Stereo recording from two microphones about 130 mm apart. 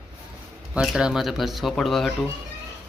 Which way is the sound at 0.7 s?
5° right (ahead or behind).